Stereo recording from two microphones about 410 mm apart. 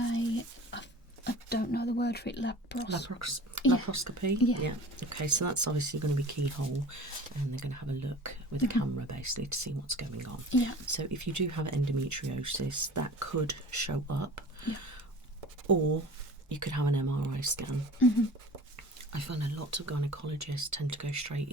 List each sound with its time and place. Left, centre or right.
0.0 s a sound: left
2.8 s speech: left
3.2 s speech: right
3.6 s speech: left
3.9 s speech: right
4.4 s speech: left
4.6 s speech: right
10.5 s speech: left
10.8 s speech: right
16.5 s speech: right
18.0 s speech: left
19.1 s speech: right